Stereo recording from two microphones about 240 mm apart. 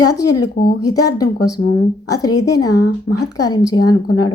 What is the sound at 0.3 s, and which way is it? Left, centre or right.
Speech, left.